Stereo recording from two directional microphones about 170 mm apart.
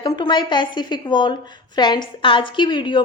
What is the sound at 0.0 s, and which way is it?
A woman's voice, 25° left (ahead or behind).